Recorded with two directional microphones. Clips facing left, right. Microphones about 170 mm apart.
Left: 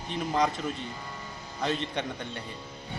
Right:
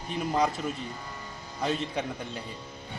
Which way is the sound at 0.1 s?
5° right (ahead or behind).